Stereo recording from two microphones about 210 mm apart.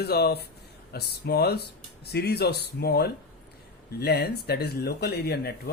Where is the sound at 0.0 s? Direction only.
50° left (ahead or behind).